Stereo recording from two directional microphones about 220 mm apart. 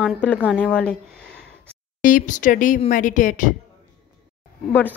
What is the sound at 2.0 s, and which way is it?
Speech, 35° left (ahead or behind).